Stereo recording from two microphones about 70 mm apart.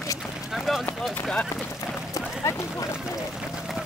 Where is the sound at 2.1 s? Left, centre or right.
Left.